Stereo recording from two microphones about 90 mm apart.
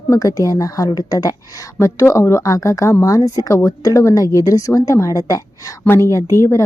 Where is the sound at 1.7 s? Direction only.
30° left (ahead or behind).